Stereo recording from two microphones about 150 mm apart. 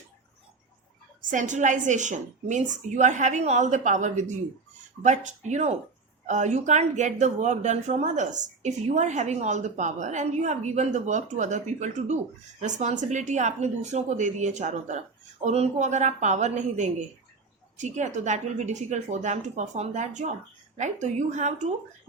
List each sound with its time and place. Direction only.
1.2 s a woman's voice: 60° right (ahead or behind)